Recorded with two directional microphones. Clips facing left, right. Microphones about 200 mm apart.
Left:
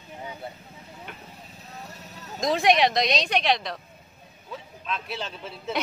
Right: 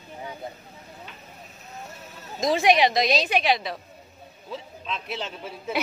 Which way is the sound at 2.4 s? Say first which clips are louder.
Right 1 dB; centre (ahead or behind).